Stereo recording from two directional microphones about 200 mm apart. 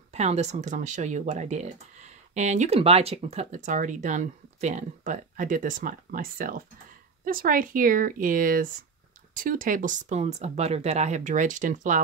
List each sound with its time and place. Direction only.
0.1 s speech: 35° right (ahead or behind)